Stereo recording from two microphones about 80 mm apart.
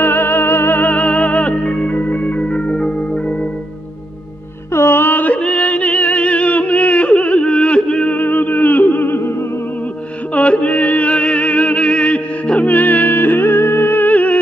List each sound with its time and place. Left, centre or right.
0.0 s music: left
4.7 s music: left
10.3 s music: centre